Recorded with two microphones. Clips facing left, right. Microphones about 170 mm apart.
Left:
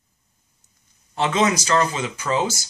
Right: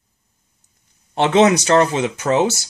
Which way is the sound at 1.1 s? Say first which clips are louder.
Right 7 dB; 70° right (ahead or behind).